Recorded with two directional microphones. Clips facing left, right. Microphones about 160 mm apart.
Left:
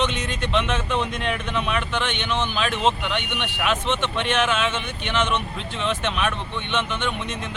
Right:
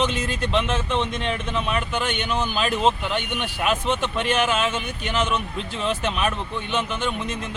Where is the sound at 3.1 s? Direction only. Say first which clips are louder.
Right 1 dB; 35° right (ahead or behind).